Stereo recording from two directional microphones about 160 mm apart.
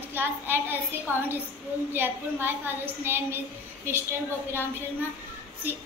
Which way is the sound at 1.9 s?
15° right (ahead or behind).